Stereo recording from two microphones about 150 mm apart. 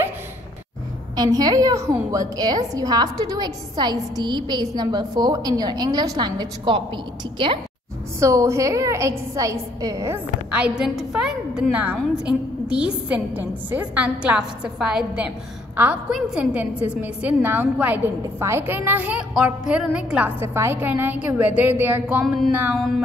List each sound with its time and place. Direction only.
1.1 s a woman's voice: 25° right (ahead or behind)
8.2 s a woman's voice: 20° right (ahead or behind)
10.5 s a woman's voice: 5° right (ahead or behind)